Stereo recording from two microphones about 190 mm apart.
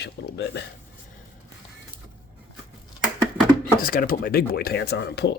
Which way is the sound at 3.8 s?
50° left (ahead or behind).